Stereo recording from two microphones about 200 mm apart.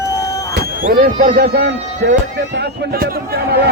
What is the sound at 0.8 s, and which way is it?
Speech, 45° right (ahead or behind).